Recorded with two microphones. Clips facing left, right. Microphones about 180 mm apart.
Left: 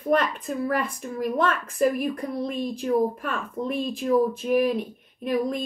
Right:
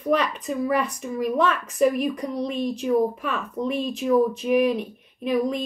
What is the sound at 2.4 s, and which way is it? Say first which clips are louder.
Speech: right 4 dB; 55° left (ahead or behind).